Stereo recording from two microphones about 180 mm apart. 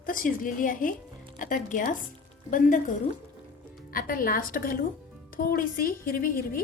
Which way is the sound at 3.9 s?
50° left (ahead or behind).